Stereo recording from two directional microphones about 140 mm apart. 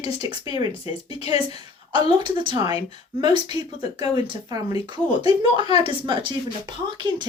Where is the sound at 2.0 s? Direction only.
35° right (ahead or behind).